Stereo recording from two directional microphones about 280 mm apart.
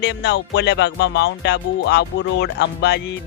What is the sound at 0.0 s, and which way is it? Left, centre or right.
Music, left.